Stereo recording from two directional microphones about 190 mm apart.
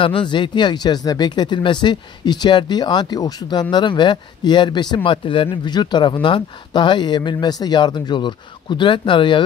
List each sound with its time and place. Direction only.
0.0 s speech: 25° left (ahead or behind)